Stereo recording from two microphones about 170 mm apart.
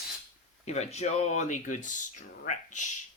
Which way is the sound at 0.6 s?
40° left (ahead or behind).